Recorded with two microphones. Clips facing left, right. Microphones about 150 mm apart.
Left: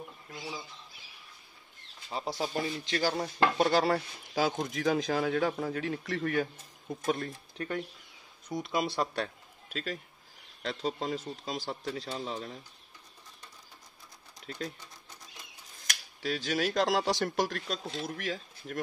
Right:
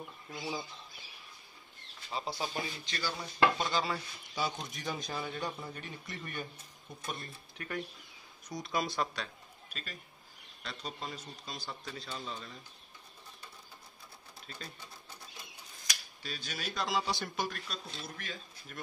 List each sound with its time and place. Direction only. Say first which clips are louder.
2.2 s speech: left 7 dB; 70° left (ahead or behind)
4.6 s speech: left 11 dB; 90° left
8.5 s speech: left 4 dB; 25° left (ahead or behind)
9.1 s a sound: left 8 dB; 75° left (ahead or behind)
10.6 s a man's voice: left 9 dB; 90° left
14.4 s speech: left 10 dB; 80° left
16.2 s speech: left 14 dB; 90° left